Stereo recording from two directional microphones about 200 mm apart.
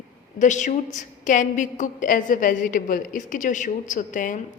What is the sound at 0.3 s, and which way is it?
A woman's voice, 40° left (ahead or behind).